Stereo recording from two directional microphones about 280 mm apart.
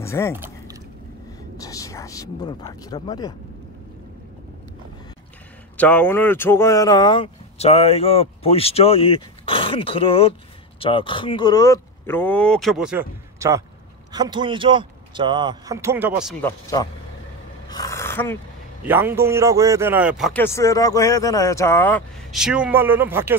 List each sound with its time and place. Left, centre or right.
0.0 s speech: centre
1.6 s speech: centre
5.8 s speech: centre
17.6 s a sound: centre
18.8 s speech: centre